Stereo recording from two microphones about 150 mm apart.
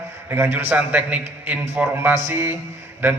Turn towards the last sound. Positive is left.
turn(degrees=-15)  # may be behind; listen again after turning